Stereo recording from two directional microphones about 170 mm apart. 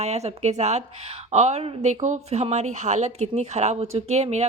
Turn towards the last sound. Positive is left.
turn(degrees=-40)  # may be behind; listen again after turning